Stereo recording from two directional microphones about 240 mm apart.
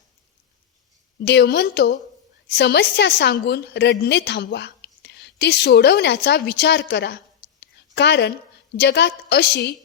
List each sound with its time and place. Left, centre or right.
1.2 s a woman's voice: left
7.6 s a sound: left
8.7 s a woman's voice: left